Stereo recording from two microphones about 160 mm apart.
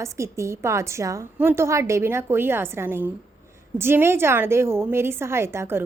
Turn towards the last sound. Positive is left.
turn(degrees=-15)  # may be behind; listen again after turning